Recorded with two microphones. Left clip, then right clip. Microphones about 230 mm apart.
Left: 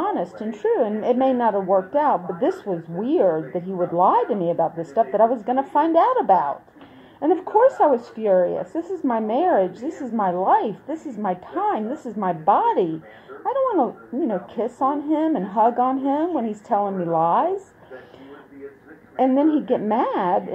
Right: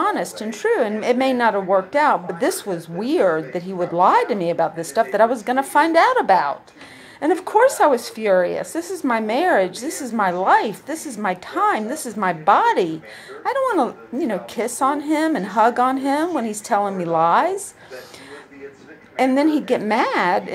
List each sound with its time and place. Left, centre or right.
0.6 s a woman's voice: right
9.7 s a woman's voice: centre
10.1 s a woman's voice: right
19.1 s a woman's voice: right